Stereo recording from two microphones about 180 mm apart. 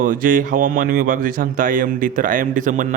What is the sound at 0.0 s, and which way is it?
A man's voice, 50° right (ahead or behind).